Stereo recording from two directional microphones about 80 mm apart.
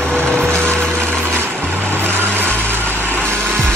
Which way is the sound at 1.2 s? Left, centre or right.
Right.